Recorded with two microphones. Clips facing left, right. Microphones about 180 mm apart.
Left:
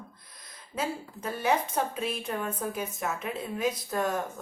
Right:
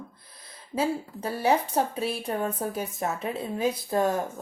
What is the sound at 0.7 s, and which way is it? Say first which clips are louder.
Speech: right 6 dB; 30° right (ahead or behind).